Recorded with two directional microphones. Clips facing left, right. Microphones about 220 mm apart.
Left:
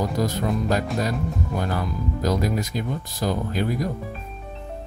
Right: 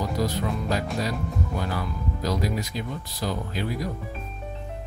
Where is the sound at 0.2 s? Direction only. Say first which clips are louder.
Left 3 dB; 50° left (ahead or behind).